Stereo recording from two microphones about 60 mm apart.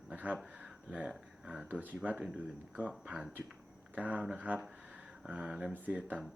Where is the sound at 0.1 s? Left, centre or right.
Right.